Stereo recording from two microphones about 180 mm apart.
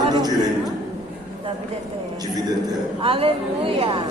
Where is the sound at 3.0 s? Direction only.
30° right (ahead or behind).